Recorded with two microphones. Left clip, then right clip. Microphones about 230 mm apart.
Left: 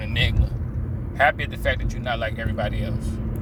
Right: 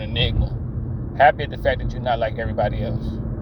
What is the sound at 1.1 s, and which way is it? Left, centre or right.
Speech, centre.